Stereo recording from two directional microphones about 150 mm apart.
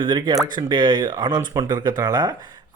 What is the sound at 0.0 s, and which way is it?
A man's voice, 30° right (ahead or behind).